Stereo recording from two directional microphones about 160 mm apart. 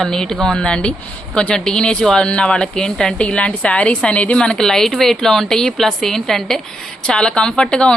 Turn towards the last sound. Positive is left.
turn(degrees=5)  # may be behind; listen again after turning